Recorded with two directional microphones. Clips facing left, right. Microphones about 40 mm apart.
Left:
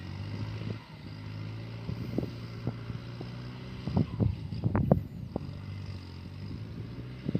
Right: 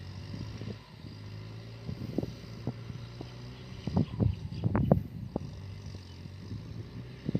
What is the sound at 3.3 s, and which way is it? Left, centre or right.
Vehicle, left.